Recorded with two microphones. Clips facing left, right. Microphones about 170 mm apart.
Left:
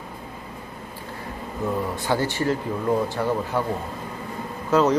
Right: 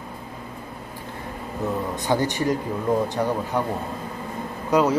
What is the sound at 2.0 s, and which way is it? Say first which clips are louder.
Speech: right 1 dB; 15° right (ahead or behind).